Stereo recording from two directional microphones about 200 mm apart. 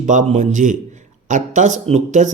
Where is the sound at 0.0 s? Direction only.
40° right (ahead or behind).